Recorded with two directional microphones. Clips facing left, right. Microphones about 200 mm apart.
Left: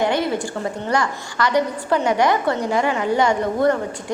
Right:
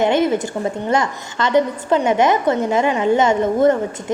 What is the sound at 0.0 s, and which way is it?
A woman's voice, 20° right (ahead or behind).